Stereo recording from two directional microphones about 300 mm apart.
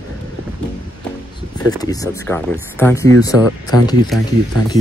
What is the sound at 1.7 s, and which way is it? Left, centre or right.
Speech, centre.